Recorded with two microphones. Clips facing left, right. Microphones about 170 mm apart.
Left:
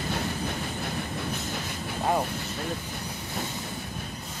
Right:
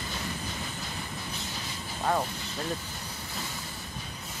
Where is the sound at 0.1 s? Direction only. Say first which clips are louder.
Left 6 dB; 60° left (ahead or behind).